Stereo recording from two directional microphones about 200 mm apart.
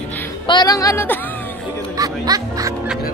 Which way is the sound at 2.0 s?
20° right (ahead or behind).